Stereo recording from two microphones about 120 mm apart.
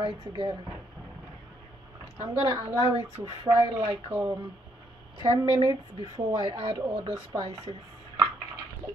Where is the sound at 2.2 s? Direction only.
40° right (ahead or behind).